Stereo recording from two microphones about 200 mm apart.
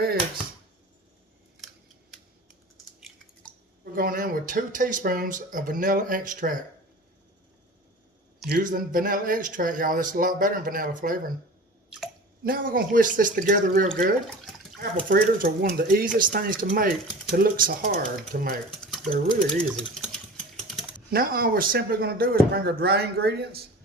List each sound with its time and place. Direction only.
2.5 s typing: centre (ahead or behind)
3.9 s speech: 45° right (ahead or behind)
8.4 s speech: 45° right (ahead or behind)
12.4 s speech: 45° right (ahead or behind)
14.3 s water: centre (ahead or behind)
14.8 s speech: 45° right (ahead or behind)
19.5 s sewing machine: 5° left (ahead or behind)
21.1 s speech: 45° right (ahead or behind)